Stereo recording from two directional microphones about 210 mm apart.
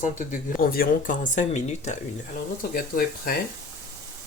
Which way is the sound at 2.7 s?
45° left (ahead or behind).